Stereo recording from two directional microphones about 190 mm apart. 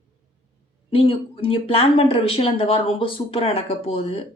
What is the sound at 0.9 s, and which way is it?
Speech, 30° left (ahead or behind).